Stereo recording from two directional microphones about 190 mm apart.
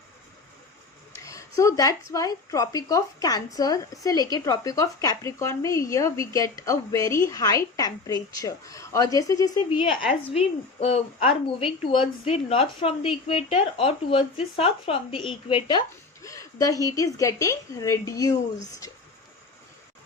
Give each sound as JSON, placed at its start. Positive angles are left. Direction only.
{"t": 1.1, "sound": "speech", "side_deg": 15}
{"t": 9.7, "sound": "a woman's voice", "side_deg": 30}